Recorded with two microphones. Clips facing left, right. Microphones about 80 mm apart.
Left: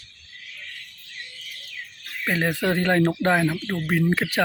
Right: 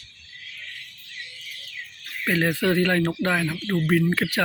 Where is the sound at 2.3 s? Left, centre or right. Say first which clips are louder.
Right 1 dB; centre.